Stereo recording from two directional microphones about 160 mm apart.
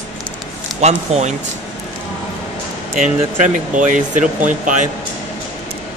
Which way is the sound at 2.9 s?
50° right (ahead or behind).